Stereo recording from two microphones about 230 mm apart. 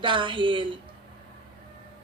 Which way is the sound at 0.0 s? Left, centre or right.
Right.